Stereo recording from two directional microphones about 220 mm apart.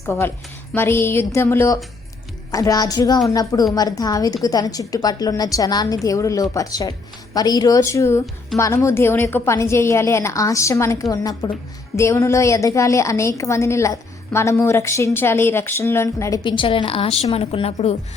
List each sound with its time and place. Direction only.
0.0 s a woman's voice: 15° left (ahead or behind)